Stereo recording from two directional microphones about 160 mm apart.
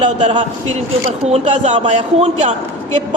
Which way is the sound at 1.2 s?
45° right (ahead or behind).